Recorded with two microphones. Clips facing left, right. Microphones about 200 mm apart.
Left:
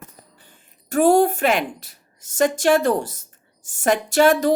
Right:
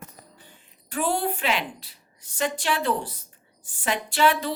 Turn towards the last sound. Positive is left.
turn(degrees=45)  # may be behind; listen again after turning